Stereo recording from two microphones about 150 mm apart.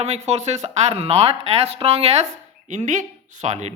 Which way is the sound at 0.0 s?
50° right (ahead or behind).